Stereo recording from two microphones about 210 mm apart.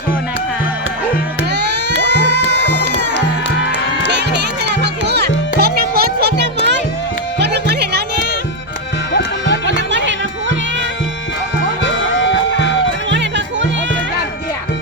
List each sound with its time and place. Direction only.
1.5 s music: 55° right (ahead or behind)
2.6 s crowd: 55° right (ahead or behind)
3.7 s music: 55° right (ahead or behind)
9.6 s music: 60° right (ahead or behind)
11.8 s music: 60° left (ahead or behind)
13.1 s music: 60° right (ahead or behind)